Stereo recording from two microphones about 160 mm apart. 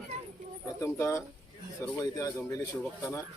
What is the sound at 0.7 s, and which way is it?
A man's voice, 15° left (ahead or behind).